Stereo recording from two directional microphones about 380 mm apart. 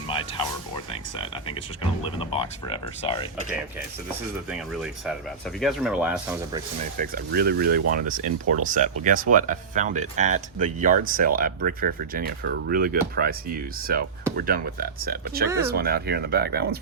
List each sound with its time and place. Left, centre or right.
0.1 s music: centre
2.1 s speech: centre
4.5 s speech: centre
7.0 s speech: right
15.4 s speech: centre
15.7 s speech: right